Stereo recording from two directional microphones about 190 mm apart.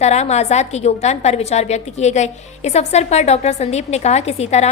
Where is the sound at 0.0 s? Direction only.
35° left (ahead or behind).